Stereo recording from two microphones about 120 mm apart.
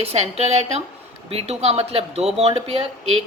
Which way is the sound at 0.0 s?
60° right (ahead or behind).